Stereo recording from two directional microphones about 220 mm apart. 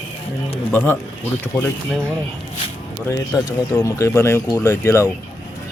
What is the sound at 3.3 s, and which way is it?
Speech, 15° left (ahead or behind).